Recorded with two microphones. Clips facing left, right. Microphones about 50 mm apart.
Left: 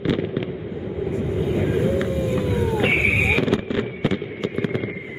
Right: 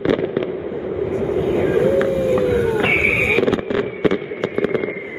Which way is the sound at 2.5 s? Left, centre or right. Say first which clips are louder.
Right 5 dB; right.